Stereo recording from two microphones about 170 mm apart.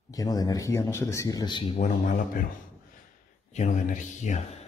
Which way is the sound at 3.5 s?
45° left (ahead or behind).